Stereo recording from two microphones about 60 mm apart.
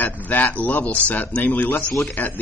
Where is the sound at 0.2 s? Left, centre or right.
Left.